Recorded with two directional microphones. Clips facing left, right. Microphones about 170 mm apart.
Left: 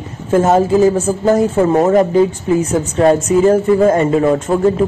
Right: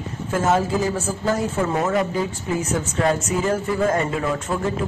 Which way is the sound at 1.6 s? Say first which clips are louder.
Left 9 dB; 40° left (ahead or behind).